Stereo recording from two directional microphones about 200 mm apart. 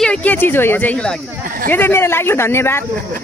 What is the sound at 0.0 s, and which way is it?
Speech, 5° left (ahead or behind).